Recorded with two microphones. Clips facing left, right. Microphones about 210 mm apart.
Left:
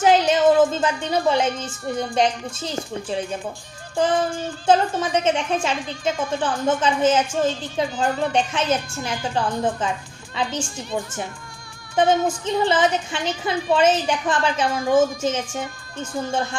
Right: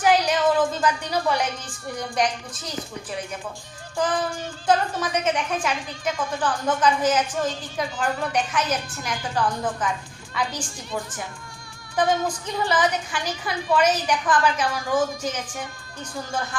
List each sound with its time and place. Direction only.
0.0 s a woman's voice: 25° left (ahead or behind)
3.9 s music: 25° left (ahead or behind)
4.6 s a woman's voice: 25° left (ahead or behind)